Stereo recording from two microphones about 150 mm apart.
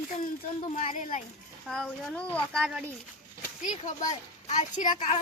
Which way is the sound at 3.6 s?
60° left (ahead or behind).